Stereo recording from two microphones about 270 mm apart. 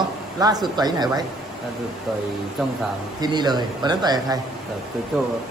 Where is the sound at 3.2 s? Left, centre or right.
Centre.